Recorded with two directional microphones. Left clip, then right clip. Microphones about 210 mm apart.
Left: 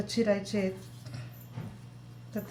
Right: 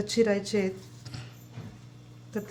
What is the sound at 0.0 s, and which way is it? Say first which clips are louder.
Speech: right 3 dB; 50° right (ahead or behind).